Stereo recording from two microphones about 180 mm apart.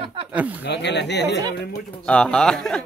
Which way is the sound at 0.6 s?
75° left (ahead or behind).